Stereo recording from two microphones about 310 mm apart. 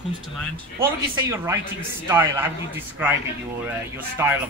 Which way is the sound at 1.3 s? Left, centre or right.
Centre.